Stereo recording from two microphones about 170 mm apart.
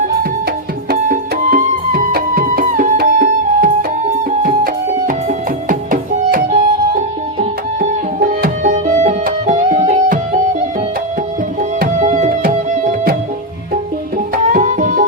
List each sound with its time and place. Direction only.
0.9 s music: 55° right (ahead or behind)
8.3 s music: 55° right (ahead or behind)
11.9 s music: 45° right (ahead or behind)
14.5 s music: 50° right (ahead or behind)